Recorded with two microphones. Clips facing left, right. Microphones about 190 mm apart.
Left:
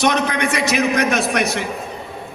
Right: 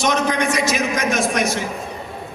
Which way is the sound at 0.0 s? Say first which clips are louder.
Left 1 dB; 60° left (ahead or behind).